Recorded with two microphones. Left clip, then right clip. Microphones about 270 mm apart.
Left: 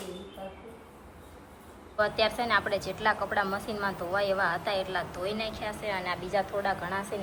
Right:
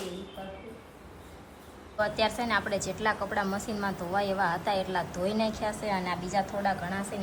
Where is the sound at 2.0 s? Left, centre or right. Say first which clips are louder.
Left 1 dB; centre.